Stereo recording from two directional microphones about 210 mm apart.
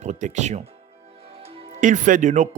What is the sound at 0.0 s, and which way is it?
Speech, 35° right (ahead or behind).